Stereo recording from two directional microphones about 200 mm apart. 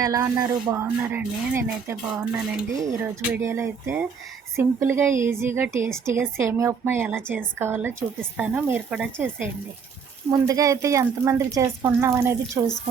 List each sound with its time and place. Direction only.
0.0 s speech: 15° right (ahead or behind)